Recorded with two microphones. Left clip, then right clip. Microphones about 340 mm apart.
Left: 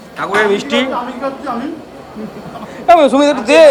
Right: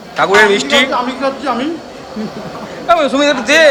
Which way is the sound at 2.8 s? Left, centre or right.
Centre.